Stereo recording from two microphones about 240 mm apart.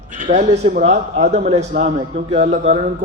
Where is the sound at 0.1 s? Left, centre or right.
Right.